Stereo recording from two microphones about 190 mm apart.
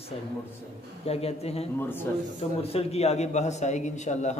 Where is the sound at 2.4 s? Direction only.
30° left (ahead or behind).